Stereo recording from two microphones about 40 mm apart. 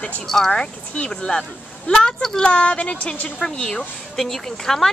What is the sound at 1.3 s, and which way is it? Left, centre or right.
Speech, left.